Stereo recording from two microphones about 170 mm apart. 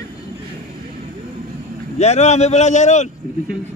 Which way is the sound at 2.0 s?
40° left (ahead or behind).